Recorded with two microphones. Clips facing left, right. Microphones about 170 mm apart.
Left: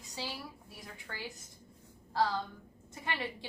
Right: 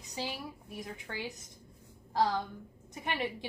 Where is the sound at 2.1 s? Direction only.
20° right (ahead or behind).